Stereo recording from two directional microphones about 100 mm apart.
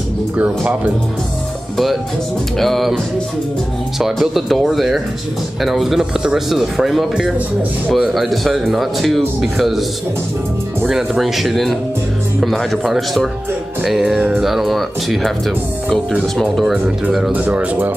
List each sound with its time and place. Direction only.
0.4 s speech: 15° right (ahead or behind)
2.6 s speech: centre (ahead or behind)
4.0 s speech: centre (ahead or behind)
16.3 s speech: centre (ahead or behind)
17.3 s speech: 15° right (ahead or behind)